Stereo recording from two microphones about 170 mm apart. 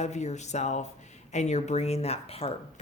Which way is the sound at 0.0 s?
40° left (ahead or behind).